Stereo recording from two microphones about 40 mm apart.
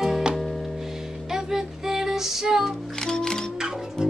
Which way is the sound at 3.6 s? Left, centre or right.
Centre.